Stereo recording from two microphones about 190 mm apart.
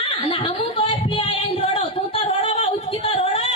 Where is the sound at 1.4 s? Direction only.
30° left (ahead or behind).